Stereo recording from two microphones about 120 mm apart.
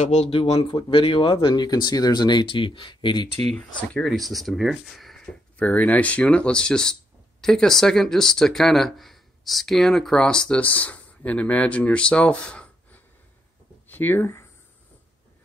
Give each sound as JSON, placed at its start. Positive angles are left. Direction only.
{"t": 0.0, "sound": "speech", "side_deg": 70}
{"t": 0.3, "sound": "speech", "side_deg": 50}
{"t": 3.5, "sound": "speech", "side_deg": 5}